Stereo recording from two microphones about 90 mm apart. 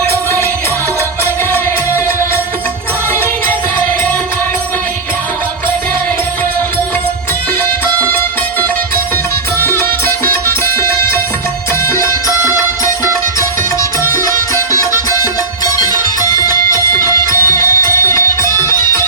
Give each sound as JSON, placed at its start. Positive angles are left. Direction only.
{"t": 0.0, "sound": "music", "side_deg": 30}
{"t": 9.6, "sound": "music", "side_deg": 25}
{"t": 14.1, "sound": "music", "side_deg": 35}